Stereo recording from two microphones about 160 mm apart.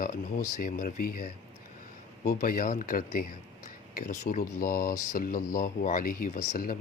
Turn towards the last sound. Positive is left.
turn(degrees=60)  # may be behind; listen again after turning